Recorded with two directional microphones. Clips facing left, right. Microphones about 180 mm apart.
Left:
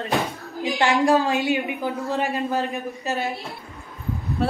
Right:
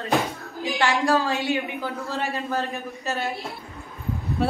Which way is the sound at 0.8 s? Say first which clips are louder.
Left 3 dB; 15° left (ahead or behind).